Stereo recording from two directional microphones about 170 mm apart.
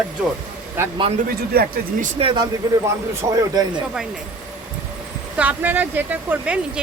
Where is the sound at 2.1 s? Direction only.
30° right (ahead or behind).